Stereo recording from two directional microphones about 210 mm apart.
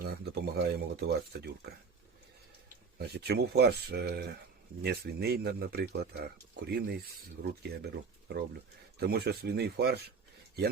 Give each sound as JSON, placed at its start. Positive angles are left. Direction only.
{"t": 0.0, "sound": "speech", "side_deg": -50}
{"t": 3.1, "sound": "speech", "side_deg": -50}